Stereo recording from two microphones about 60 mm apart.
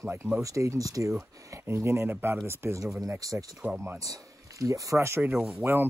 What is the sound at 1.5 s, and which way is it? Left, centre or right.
Speech, right.